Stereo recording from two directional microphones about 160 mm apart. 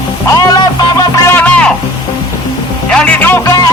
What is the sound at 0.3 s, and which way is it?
Music, 20° left (ahead or behind).